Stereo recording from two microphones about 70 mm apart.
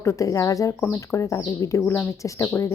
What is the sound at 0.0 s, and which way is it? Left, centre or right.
Speech, left.